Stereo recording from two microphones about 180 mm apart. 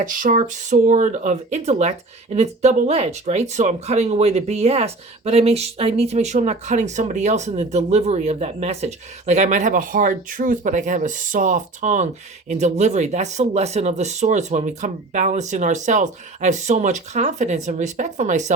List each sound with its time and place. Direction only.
0.0 s speech: 50° right (ahead or behind)